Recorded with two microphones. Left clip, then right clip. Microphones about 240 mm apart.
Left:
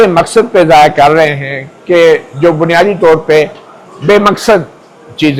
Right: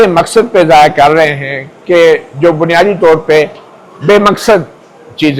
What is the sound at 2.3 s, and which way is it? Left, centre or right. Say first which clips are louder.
A man's voice: even; right.